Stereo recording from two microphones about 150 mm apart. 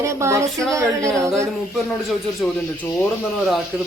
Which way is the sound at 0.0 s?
20° right (ahead or behind).